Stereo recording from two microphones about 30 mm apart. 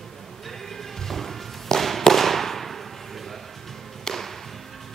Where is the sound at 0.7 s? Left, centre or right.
Centre.